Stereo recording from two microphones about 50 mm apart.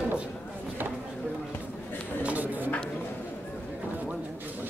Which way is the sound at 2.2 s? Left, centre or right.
Right.